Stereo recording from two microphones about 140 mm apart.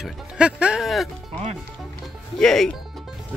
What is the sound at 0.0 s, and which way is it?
Music, 5° right (ahead or behind).